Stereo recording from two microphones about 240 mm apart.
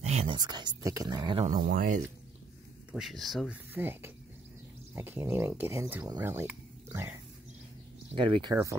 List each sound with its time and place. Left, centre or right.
0.0 s speech: right
1.5 s speech: right
2.9 s speech: centre
8.1 s speech: centre